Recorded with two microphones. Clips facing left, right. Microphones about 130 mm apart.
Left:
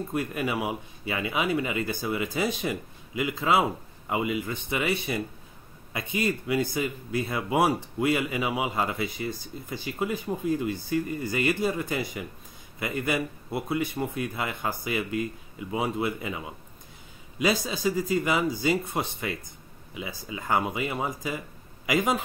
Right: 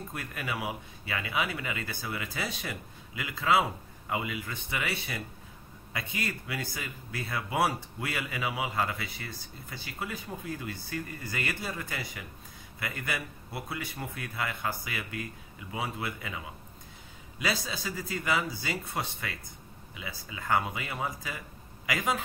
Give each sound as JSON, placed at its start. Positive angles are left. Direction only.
{"t": 0.1, "sound": "speech", "side_deg": 20}
{"t": 17.4, "sound": "speech", "side_deg": 20}